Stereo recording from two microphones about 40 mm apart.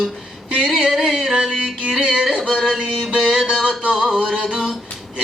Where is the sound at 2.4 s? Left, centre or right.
Centre.